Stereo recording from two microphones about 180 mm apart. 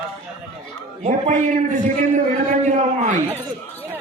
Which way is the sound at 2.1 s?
40° right (ahead or behind).